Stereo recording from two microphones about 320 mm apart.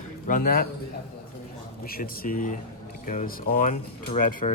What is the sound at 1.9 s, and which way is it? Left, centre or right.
Speech, left.